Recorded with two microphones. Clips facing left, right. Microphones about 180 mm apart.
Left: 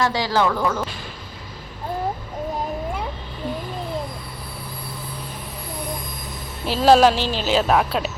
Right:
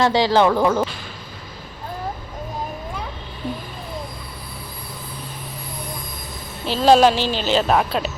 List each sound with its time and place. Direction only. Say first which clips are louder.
0.0 s speech: right 4 dB; 25° right (ahead or behind)
6.7 s speech: even; 5° left (ahead or behind)